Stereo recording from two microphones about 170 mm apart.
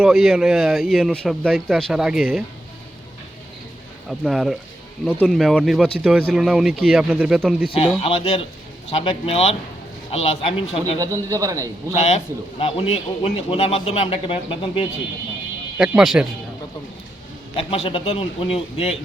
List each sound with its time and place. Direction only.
0.0 s speech: centre (ahead or behind)
4.2 s speech: centre (ahead or behind)
8.0 s a man's voice: 35° left (ahead or behind)
11.0 s a man's voice: 20° right (ahead or behind)
11.9 s a man's voice: 40° left (ahead or behind)
15.8 s speech: 5° right (ahead or behind)
17.6 s a man's voice: 35° left (ahead or behind)